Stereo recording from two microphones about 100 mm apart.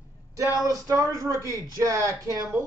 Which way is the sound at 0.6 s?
30° right (ahead or behind).